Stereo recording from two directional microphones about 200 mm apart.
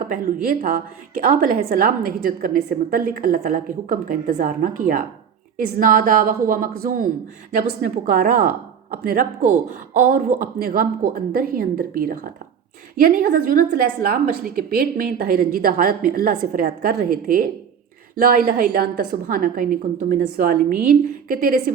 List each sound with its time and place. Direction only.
0.0 s a woman's voice: 45° right (ahead or behind)